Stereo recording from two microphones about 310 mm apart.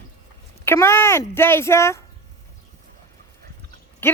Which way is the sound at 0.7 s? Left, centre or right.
Centre.